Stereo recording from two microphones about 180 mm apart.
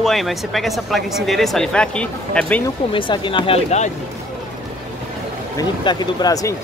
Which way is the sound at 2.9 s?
25° left (ahead or behind).